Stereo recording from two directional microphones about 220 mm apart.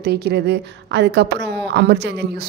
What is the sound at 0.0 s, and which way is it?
Speech, 45° right (ahead or behind).